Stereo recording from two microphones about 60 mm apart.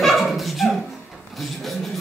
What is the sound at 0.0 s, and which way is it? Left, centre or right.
Dog, centre.